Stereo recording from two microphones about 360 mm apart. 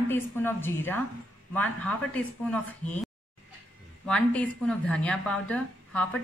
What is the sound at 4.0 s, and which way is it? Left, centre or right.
A woman's voice, centre.